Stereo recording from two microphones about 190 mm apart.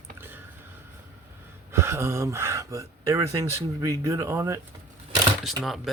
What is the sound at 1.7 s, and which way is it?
Speech, 15° right (ahead or behind).